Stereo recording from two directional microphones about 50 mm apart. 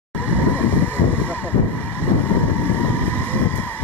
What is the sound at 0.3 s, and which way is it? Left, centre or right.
Vehicle, left.